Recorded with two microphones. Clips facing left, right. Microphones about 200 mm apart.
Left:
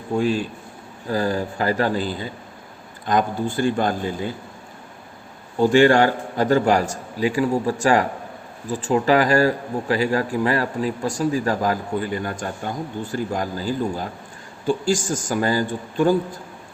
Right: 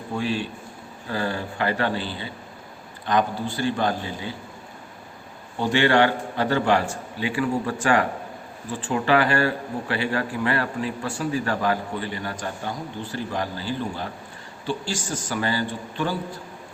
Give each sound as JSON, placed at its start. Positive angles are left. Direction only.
{"t": 0.2, "sound": "a man's voice", "side_deg": 45}
{"t": 5.5, "sound": "a man's voice", "side_deg": 45}